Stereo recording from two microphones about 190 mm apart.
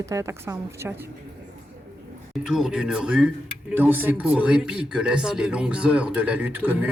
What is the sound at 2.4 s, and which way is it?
Speech, 5° right (ahead or behind).